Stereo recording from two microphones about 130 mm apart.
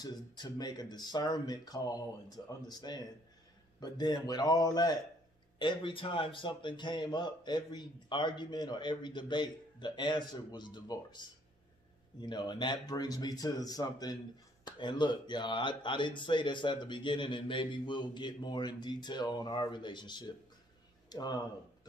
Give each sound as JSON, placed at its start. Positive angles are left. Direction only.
{"t": 0.0, "sound": "a man's voice", "side_deg": 30}
{"t": 5.6, "sound": "a man's voice", "side_deg": 40}